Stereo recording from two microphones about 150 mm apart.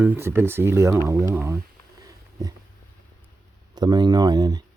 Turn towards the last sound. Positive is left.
turn(degrees=-25)  # may be behind; listen again after turning